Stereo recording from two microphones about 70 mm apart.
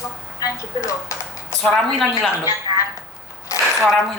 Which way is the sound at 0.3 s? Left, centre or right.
Left.